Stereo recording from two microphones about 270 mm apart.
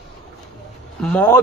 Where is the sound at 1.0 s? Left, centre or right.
Centre.